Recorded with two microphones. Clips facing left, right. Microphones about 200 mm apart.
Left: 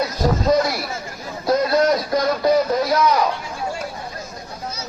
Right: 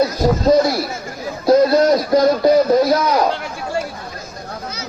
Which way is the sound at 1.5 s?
30° right (ahead or behind).